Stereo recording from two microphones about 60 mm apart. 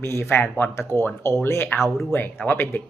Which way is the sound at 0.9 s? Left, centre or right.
Left.